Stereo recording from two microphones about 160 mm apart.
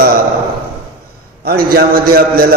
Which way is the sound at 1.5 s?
70° right (ahead or behind).